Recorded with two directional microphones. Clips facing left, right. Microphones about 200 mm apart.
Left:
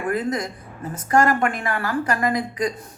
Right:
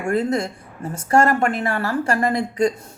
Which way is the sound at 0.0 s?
30° right (ahead or behind).